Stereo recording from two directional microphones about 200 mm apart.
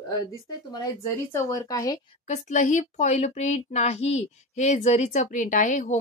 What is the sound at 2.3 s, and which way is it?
Speech, 40° left (ahead or behind).